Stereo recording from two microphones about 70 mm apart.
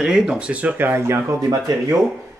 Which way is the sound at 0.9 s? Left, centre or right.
Right.